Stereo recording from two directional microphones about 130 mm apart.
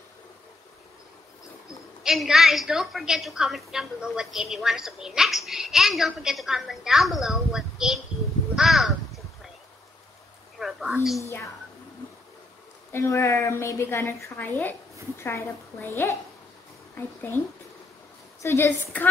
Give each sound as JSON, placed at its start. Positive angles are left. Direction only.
{"t": 2.0, "sound": "a woman's voice", "side_deg": 0}
{"t": 8.5, "sound": "crow", "side_deg": 0}
{"t": 10.6, "sound": "a sound", "side_deg": 0}
{"t": 11.1, "sound": "a woman's voice", "side_deg": 25}
{"t": 12.9, "sound": "a woman's voice", "side_deg": 20}
{"t": 18.4, "sound": "a woman's voice", "side_deg": 20}